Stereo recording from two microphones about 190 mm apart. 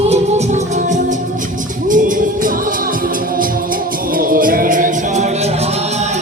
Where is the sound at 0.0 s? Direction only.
35° right (ahead or behind).